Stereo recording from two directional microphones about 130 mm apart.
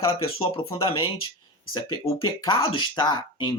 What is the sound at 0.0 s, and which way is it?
Speech, 45° left (ahead or behind).